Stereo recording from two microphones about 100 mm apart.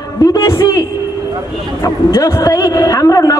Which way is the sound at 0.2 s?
40° left (ahead or behind).